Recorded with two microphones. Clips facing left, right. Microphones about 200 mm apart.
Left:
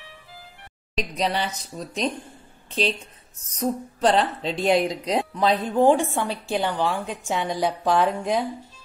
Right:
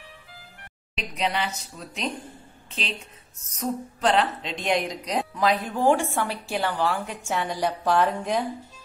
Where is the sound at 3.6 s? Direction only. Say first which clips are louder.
Left 3 dB; 35° left (ahead or behind); by 8.4 s 10° left (ahead or behind).